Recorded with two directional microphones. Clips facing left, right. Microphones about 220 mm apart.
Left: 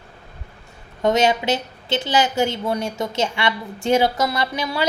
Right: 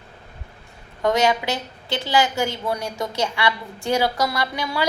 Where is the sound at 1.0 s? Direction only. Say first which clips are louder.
Left 2 dB; 25° left (ahead or behind).